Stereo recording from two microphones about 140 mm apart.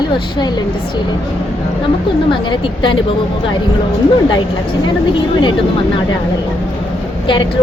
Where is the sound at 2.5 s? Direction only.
35° left (ahead or behind).